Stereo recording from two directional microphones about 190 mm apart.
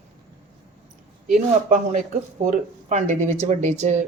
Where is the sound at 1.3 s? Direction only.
40° right (ahead or behind).